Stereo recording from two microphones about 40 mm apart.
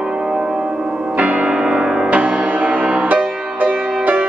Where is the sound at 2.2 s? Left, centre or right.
Right.